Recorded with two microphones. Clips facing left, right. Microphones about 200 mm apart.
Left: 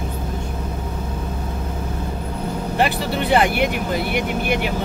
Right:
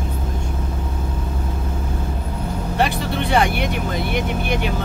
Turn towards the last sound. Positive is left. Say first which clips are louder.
# left 2 dB
turn(degrees=5)  # may be behind; listen again after turning